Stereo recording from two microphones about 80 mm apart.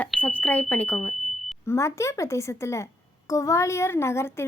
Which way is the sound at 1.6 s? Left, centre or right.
Left.